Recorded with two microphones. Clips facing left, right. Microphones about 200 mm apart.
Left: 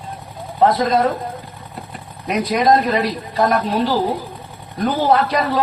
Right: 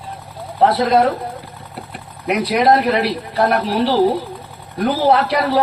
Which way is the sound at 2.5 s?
65° right (ahead or behind).